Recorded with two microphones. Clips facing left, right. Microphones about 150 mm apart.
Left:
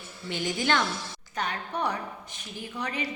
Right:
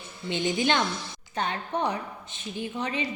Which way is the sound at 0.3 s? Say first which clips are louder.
Right 2 dB; 20° right (ahead or behind).